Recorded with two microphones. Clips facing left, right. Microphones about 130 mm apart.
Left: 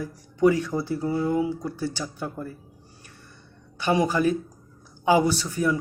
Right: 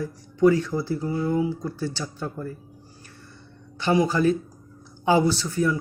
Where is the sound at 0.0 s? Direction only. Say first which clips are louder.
Right 1 dB; 15° left (ahead or behind).